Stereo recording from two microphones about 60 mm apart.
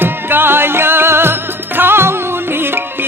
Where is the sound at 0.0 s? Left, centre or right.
Right.